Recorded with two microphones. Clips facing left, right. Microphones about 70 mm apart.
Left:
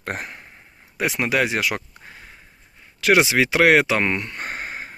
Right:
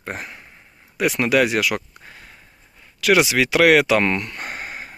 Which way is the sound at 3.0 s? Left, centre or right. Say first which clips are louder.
Even; left.